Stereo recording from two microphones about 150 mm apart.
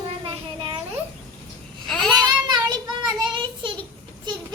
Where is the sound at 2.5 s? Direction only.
30° right (ahead or behind).